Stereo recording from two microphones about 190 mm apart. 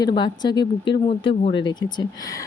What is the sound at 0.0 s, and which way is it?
Speech, 25° left (ahead or behind).